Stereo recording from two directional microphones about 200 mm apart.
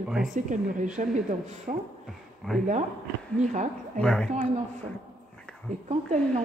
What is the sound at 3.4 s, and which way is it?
Speech, 40° right (ahead or behind).